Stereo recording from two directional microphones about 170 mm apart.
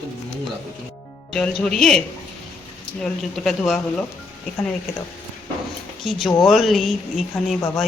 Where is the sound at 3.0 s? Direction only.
Centre (ahead or behind).